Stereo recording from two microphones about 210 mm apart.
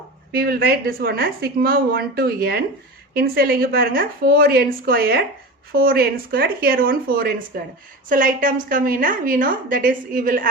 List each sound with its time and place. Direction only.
0.3 s a woman's voice: 45° right (ahead or behind)